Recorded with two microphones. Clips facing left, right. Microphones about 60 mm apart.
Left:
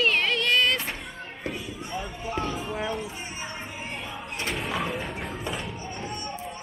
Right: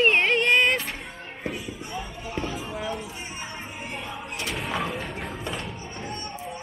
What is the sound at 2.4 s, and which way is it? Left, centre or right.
Music, centre.